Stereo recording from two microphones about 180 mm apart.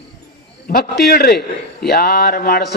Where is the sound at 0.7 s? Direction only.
60° left (ahead or behind).